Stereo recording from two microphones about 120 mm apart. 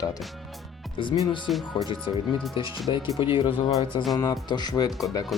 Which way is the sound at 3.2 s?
45° left (ahead or behind).